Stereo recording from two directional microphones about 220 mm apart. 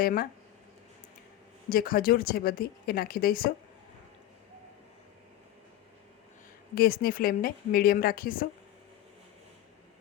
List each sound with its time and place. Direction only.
0.0 s a woman's voice: 40° left (ahead or behind)
1.7 s a woman's voice: 40° left (ahead or behind)
6.7 s a woman's voice: 40° left (ahead or behind)